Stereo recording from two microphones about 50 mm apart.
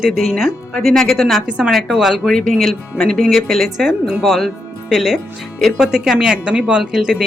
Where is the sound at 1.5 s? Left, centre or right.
Right.